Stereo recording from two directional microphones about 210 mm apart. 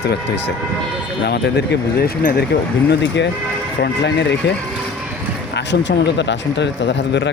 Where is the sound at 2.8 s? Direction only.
55° left (ahead or behind).